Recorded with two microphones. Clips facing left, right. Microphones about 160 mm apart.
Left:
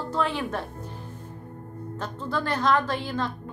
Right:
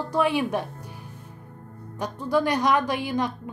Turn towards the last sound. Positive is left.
turn(degrees=-15)  # may be behind; listen again after turning